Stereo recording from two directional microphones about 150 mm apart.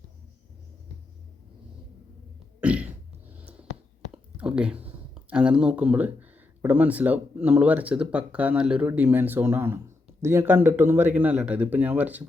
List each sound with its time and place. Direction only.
2.6 s cough: 10° right (ahead or behind)
4.1 s a sound: 5° right (ahead or behind)
5.3 s speech: 5° right (ahead or behind)